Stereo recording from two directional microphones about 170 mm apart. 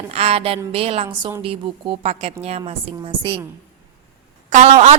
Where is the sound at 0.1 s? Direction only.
35° right (ahead or behind).